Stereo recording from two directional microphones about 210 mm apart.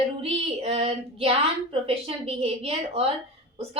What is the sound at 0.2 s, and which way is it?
A woman's voice, 30° right (ahead or behind).